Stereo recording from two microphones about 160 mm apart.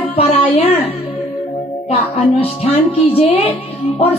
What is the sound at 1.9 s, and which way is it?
Speech, 40° left (ahead or behind).